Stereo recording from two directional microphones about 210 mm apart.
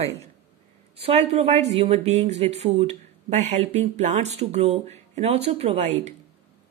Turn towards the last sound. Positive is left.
turn(degrees=-35)  # may be behind; listen again after turning